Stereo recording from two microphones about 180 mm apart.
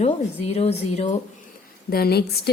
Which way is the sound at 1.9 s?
60° left (ahead or behind).